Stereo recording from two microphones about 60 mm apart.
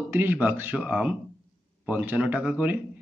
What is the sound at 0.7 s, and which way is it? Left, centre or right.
A man's voice, centre.